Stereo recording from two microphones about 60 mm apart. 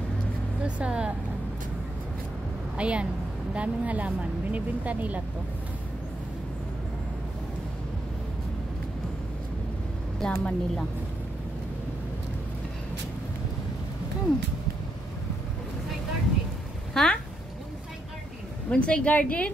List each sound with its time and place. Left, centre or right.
0.7 s speech: centre
2.8 s speech: centre
10.2 s speech: centre
16.9 s speech: centre
18.7 s a woman's voice: centre